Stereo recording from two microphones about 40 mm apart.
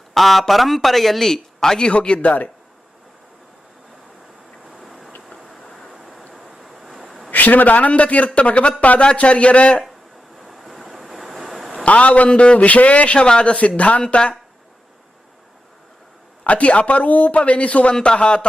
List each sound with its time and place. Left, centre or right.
0.1 s a man's voice: centre
1.9 s a man's voice: left
4.7 s vehicle: centre
5.6 s waves: centre
5.9 s vehicle: centre
6.3 s waves: centre
7.3 s a man's voice: left
10.4 s vehicle: centre
11.9 s a man's voice: left
16.4 s a man's voice: left